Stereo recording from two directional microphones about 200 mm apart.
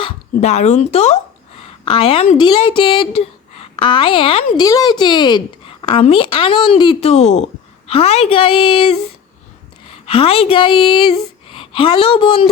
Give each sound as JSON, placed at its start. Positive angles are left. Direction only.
{"t": 0.0, "sound": "a woman's voice", "side_deg": 35}
{"t": 10.1, "sound": "speech", "side_deg": 30}